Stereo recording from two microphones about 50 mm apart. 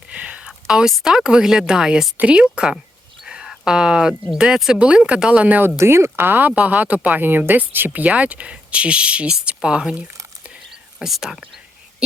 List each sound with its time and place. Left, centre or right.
0.1 s a sound: right
1.0 s a woman's voice: centre
3.2 s a sound: centre
3.5 s a woman's voice: centre
5.7 s speech: right
6.1 s speech: right
6.6 s speech: right
7.2 s speech: right
11.0 s a woman's voice: centre